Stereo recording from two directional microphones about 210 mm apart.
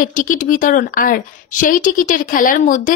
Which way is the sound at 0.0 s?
40° left (ahead or behind).